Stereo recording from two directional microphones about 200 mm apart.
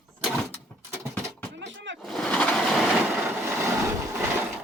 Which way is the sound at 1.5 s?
65° right (ahead or behind).